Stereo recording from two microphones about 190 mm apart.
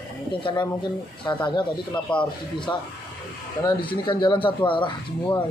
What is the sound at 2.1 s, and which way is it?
Speech, 5° left (ahead or behind).